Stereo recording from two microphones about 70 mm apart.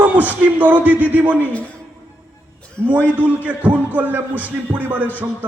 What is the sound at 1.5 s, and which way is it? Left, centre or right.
Speech, centre.